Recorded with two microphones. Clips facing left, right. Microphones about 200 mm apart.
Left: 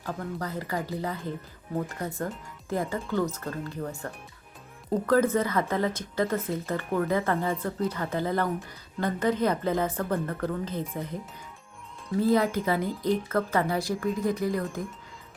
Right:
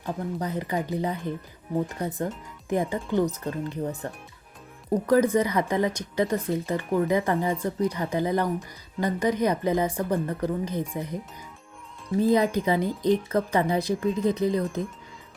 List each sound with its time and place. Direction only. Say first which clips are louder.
0.0 s speech: right 3 dB; 20° right (ahead or behind)